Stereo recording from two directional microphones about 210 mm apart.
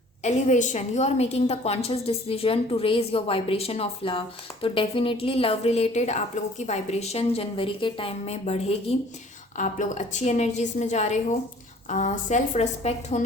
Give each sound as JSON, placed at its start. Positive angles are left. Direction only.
{"t": 0.2, "sound": "a woman's voice", "side_deg": 35}